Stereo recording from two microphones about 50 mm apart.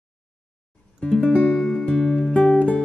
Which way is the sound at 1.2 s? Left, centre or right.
Left.